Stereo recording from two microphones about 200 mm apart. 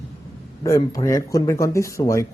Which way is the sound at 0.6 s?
15° left (ahead or behind).